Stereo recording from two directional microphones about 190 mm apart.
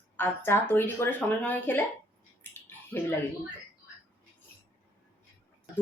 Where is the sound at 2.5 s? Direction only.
10° left (ahead or behind).